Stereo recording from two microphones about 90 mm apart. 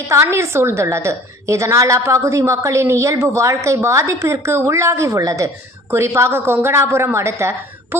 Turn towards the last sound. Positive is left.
turn(degrees=-30)  # may be behind; listen again after turning